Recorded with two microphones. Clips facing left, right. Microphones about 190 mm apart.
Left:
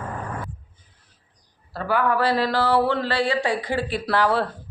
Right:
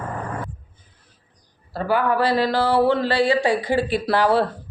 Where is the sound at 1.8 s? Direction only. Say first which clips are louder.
Right 2 dB; 5° right (ahead or behind).